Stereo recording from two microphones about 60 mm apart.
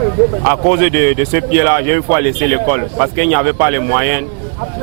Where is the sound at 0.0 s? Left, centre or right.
Right.